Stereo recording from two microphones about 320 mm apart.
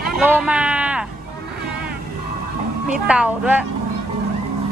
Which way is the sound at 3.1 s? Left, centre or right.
Centre.